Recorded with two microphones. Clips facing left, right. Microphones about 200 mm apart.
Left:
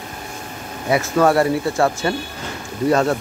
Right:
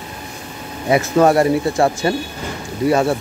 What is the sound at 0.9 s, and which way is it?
Speech, 20° right (ahead or behind).